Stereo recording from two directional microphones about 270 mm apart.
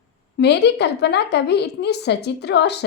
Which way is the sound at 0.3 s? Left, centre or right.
Left.